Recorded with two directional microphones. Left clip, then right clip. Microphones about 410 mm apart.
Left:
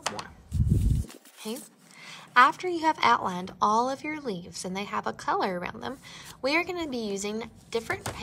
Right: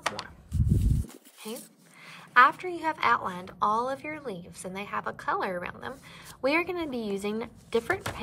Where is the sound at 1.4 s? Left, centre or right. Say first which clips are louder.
Left 3 dB; centre.